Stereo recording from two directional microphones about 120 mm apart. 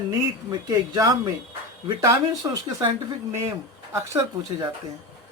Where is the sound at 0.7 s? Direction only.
30° right (ahead or behind).